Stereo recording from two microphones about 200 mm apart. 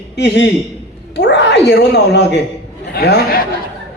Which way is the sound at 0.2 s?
60° left (ahead or behind).